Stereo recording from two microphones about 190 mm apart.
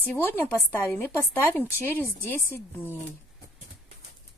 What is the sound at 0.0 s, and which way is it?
Speech, 10° left (ahead or behind).